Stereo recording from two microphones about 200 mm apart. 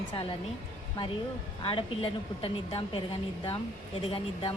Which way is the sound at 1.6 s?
25° left (ahead or behind).